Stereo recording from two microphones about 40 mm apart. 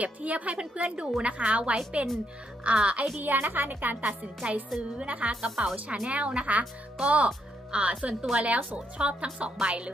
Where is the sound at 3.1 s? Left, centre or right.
Right.